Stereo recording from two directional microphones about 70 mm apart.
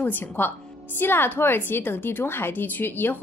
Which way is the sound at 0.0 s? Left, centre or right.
Left.